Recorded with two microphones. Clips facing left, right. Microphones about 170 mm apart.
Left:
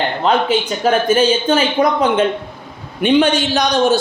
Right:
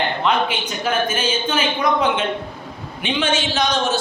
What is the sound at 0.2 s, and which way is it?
A man's voice, 35° left (ahead or behind).